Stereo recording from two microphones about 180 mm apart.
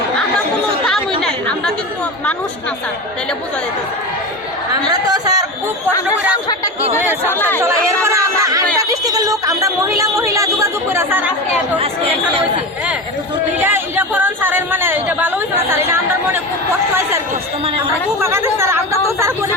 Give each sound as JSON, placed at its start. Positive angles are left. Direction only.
{"t": 1.2, "sound": "chatter", "side_deg": 5}
{"t": 4.9, "sound": "a sound", "side_deg": -20}
{"t": 7.6, "sound": "chatter", "side_deg": -15}
{"t": 8.8, "sound": "a sound", "side_deg": -20}
{"t": 10.0, "sound": "speech", "side_deg": -15}
{"t": 13.6, "sound": "speech", "side_deg": -10}
{"t": 18.2, "sound": "speech", "side_deg": -15}